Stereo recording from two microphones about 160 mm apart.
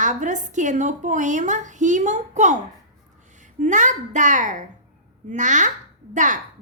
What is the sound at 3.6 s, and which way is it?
A woman's voice, 50° right (ahead or behind).